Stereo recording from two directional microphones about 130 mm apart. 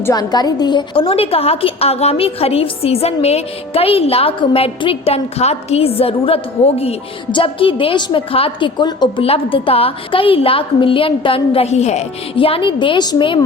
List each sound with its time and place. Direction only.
0.0 s a woman's voice: 30° left (ahead or behind); by 6.9 s 50° left (ahead or behind)
7.3 s a woman's voice: 40° left (ahead or behind)
9.2 s a woman's voice: 45° left (ahead or behind)